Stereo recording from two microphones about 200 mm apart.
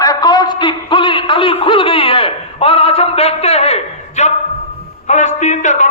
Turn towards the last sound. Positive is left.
turn(degrees=40)  # may be behind; listen again after turning